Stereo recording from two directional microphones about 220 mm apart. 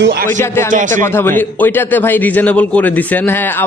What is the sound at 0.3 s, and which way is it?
Speech, 10° left (ahead or behind).